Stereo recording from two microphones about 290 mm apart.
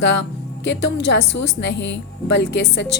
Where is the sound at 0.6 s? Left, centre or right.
Left.